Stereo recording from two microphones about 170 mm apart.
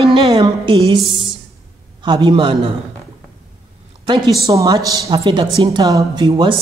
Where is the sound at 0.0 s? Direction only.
30° right (ahead or behind).